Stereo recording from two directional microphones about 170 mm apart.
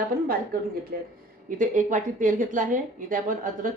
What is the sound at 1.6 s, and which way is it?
A woman's voice, 50° right (ahead or behind).